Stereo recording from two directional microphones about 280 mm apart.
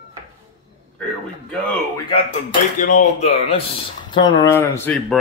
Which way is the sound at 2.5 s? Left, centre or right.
Left.